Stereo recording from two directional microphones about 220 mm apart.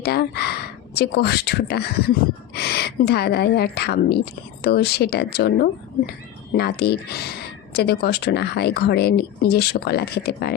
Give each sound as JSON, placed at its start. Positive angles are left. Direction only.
{"t": 0.0, "sound": "a woman's voice", "side_deg": 45}